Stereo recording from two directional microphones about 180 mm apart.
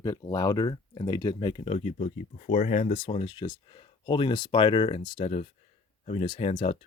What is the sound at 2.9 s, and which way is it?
Speech, 30° left (ahead or behind).